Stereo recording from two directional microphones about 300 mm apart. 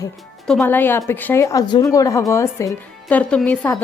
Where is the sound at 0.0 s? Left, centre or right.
Centre.